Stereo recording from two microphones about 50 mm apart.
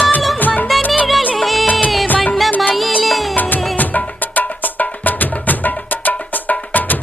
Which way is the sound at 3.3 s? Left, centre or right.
Left.